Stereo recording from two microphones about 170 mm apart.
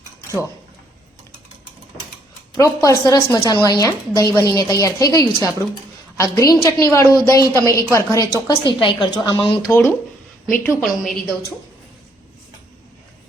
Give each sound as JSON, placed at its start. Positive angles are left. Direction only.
{"t": 2.6, "sound": "a woman's voice", "side_deg": 20}
{"t": 8.4, "sound": "a woman's voice", "side_deg": 25}
{"t": 10.6, "sound": "a woman's voice", "side_deg": 10}